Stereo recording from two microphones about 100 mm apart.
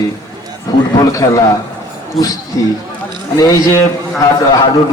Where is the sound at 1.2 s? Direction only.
40° left (ahead or behind).